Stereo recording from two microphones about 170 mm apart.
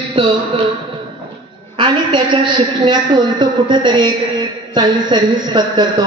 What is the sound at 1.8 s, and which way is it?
A woman's voice, 30° right (ahead or behind).